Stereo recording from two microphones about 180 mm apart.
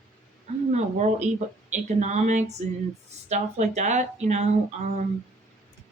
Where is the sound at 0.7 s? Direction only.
40° right (ahead or behind).